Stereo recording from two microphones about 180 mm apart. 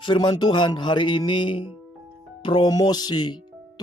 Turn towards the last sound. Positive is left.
turn(degrees=25)  # may be behind; listen again after turning